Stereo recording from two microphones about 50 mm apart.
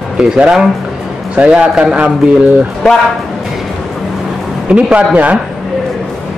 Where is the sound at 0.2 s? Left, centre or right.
Centre.